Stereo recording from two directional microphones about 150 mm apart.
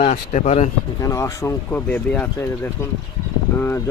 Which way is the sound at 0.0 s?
50° left (ahead or behind).